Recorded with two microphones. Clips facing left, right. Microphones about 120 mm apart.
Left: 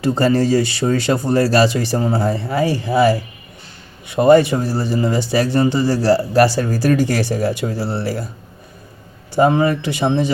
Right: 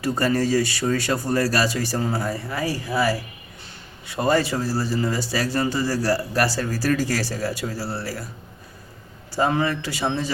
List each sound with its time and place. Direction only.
0.0 s speech: 25° left (ahead or behind)
9.3 s speech: 20° left (ahead or behind)